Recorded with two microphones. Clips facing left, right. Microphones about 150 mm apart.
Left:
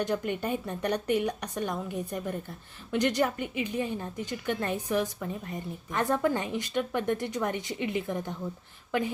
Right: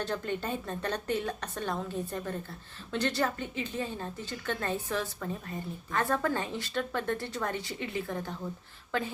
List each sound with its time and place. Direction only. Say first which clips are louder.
0.0 s a woman's voice: left 4 dB; 15° left (ahead or behind)